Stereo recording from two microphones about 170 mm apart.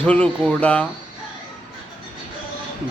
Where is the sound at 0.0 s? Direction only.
5° left (ahead or behind).